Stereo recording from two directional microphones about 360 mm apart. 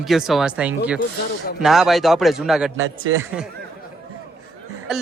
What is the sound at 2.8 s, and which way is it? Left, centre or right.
Speech, right.